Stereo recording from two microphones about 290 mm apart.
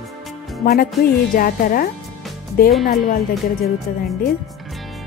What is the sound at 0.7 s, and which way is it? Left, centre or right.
Speech, left.